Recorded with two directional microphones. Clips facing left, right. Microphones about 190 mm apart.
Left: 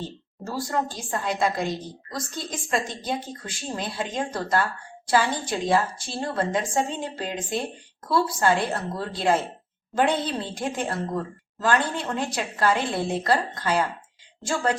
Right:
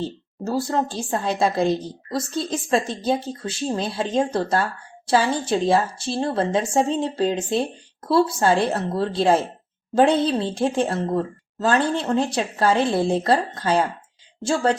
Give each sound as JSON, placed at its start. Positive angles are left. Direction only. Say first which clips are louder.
{"t": 0.4, "sound": "a woman's voice", "louder": "right 5 dB", "side_deg": -25}